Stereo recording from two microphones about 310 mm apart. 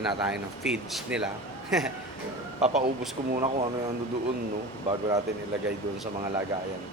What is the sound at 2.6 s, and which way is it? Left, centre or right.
Speech, right.